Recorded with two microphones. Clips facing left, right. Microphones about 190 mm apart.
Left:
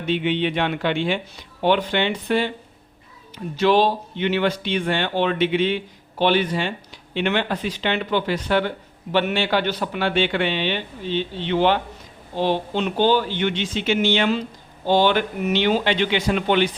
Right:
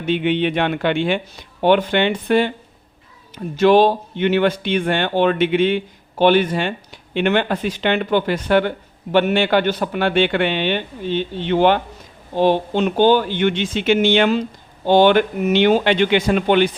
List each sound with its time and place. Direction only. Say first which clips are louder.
0.0 s speech: right 3 dB; 55° right (ahead or behind)
3.6 s speech: right 5 dB; 50° right (ahead or behind)